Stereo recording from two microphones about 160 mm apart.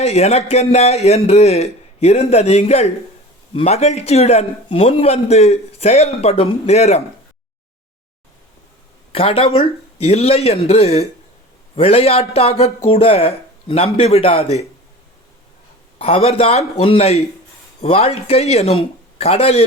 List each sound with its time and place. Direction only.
0.0 s a man's voice: 40° left (ahead or behind)
9.1 s a man's voice: 35° left (ahead or behind)
16.0 s a man's voice: 35° left (ahead or behind)